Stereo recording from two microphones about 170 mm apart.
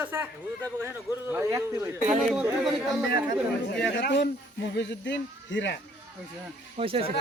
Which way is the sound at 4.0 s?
90° left.